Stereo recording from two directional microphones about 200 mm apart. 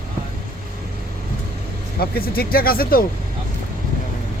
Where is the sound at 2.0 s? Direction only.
50° left (ahead or behind).